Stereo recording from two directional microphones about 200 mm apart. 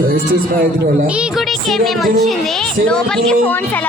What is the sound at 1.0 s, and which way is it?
A woman's voice, 5° right (ahead or behind).